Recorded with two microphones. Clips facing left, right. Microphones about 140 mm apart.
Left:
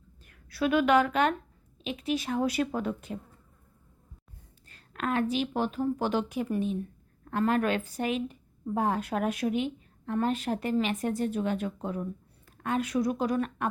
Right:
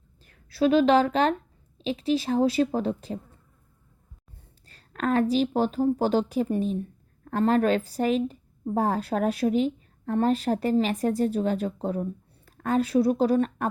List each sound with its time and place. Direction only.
0.3 s a woman's voice: 30° right (ahead or behind)
4.7 s a woman's voice: 35° right (ahead or behind)